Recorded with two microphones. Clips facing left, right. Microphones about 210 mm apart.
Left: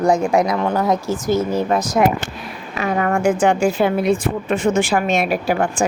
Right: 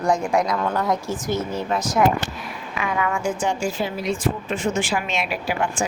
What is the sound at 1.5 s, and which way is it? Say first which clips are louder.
A woman's voice: left 6 dB; 40° left (ahead or behind).